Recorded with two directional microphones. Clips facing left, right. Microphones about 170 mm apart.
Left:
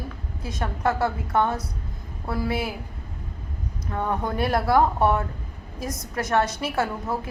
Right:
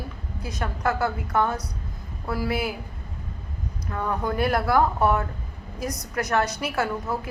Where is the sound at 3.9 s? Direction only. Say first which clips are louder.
Even; 20° left (ahead or behind).